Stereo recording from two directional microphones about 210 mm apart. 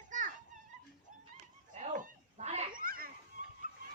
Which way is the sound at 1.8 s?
30° right (ahead or behind).